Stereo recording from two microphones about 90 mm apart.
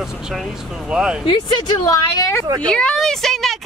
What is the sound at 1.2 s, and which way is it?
Speech, 55° left (ahead or behind).